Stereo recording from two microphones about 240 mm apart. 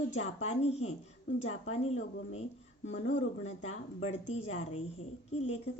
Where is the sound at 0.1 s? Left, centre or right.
Left.